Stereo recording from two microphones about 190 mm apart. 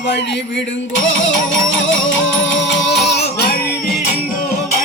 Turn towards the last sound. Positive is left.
turn(degrees=60)  # may be behind; listen again after turning